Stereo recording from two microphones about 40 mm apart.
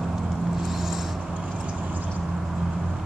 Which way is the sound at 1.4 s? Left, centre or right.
Right.